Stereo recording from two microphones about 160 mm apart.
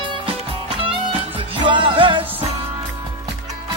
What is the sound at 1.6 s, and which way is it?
Music, 30° right (ahead or behind).